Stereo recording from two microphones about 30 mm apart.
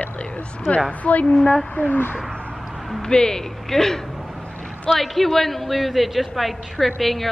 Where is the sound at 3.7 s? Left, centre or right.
Centre.